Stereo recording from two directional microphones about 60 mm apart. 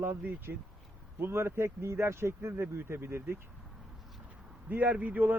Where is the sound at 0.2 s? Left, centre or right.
Right.